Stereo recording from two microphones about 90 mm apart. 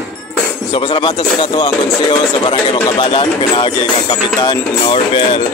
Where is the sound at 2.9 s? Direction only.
70° left (ahead or behind); by 5.4 s 90° left.